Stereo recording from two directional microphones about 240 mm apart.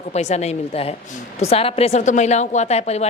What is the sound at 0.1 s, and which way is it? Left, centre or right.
A woman's voice, left.